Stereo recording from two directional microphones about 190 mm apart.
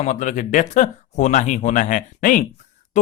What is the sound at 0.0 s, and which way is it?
Speech, 40° left (ahead or behind).